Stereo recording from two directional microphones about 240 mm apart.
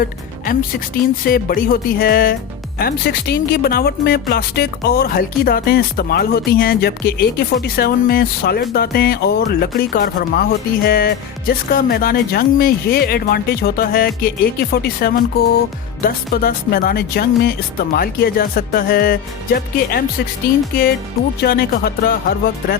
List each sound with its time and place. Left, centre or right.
1.2 s speech: left
21.4 s speech: left